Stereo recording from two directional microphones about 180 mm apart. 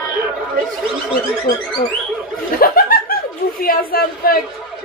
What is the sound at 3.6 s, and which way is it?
Speech, 55° left (ahead or behind).